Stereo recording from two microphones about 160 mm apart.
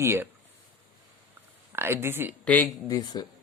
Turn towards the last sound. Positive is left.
turn(degrees=25)  # may be behind; listen again after turning